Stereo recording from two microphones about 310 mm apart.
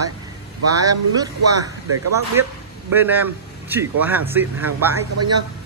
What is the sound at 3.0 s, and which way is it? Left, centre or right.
Speech, centre.